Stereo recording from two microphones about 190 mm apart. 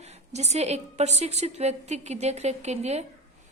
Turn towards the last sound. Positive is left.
turn(degrees=-35)  # may be behind; listen again after turning